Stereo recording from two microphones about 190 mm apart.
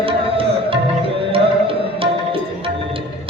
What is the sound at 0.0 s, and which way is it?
Music, 30° right (ahead or behind).